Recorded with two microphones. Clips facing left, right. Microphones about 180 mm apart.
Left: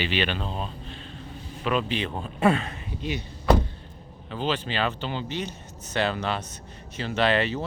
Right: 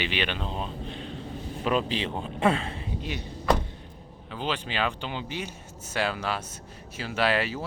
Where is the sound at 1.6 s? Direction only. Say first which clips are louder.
Even; 35° right (ahead or behind).